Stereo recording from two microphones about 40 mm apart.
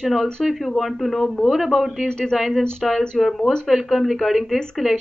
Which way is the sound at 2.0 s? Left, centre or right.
Left.